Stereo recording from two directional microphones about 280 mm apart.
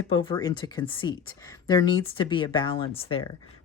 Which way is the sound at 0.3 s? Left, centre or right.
Centre.